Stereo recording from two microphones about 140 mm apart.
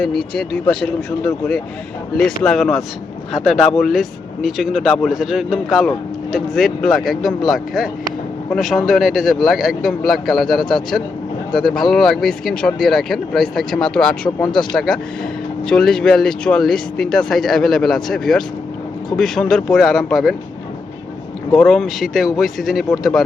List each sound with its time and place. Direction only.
0.0 s speech: 5° left (ahead or behind)
14.3 s speech: 30° left (ahead or behind)
15.6 s speech: 5° left (ahead or behind)
21.5 s speech: 5° left (ahead or behind)